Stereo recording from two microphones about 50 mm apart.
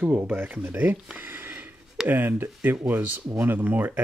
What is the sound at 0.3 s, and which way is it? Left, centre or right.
Speech, right.